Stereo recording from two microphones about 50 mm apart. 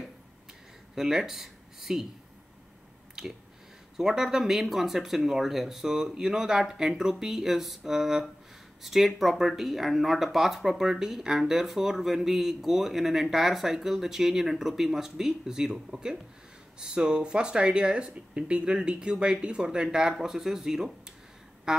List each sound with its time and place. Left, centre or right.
0.9 s speech: centre
3.2 s speech: centre